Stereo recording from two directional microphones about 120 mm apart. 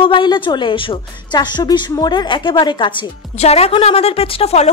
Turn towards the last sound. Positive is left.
turn(degrees=60)  # may be behind; listen again after turning